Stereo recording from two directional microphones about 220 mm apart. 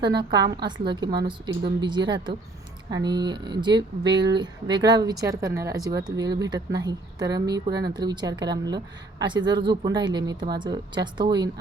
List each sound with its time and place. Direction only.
0.0 s a woman's voice: 20° right (ahead or behind)